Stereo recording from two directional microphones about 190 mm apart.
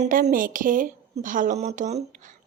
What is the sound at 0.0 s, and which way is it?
A woman's voice, 45° right (ahead or behind).